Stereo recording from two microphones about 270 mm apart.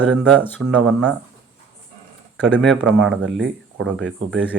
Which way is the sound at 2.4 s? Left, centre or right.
Centre.